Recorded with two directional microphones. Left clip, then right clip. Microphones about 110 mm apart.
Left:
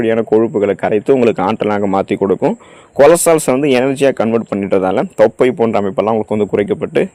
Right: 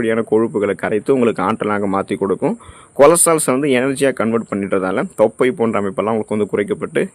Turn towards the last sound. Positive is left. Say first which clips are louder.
# left 4 dB
turn(degrees=15)  # may be behind; listen again after turning